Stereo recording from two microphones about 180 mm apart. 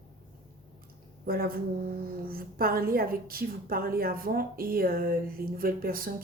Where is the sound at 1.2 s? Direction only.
55° right (ahead or behind).